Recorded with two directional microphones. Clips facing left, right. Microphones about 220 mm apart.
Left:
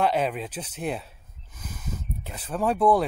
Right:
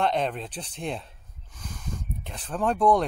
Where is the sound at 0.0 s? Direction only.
5° left (ahead or behind).